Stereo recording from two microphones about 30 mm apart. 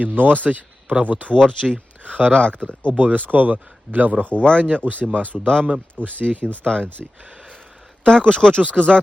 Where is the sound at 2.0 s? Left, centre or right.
Right.